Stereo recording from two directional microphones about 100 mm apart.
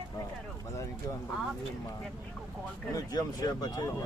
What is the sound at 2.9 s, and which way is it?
Speech, 40° left (ahead or behind).